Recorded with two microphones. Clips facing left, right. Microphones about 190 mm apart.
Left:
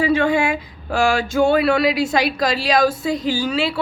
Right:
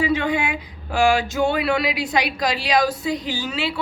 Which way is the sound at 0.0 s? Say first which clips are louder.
Left 4 dB; 20° right (ahead or behind).